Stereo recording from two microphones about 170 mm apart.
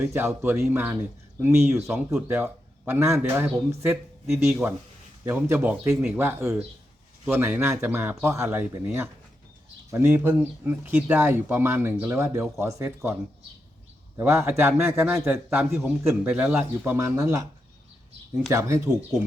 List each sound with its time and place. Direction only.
0.0 s a man's voice: 10° right (ahead or behind)
2.2 s a man's voice: 15° right (ahead or behind)
14.2 s a man's voice: 15° right (ahead or behind)